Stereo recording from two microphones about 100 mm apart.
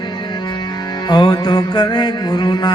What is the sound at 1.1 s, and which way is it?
A man's voice, 45° left (ahead or behind).